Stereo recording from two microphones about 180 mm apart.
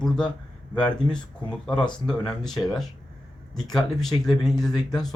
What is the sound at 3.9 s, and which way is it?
Speech, centre (ahead or behind).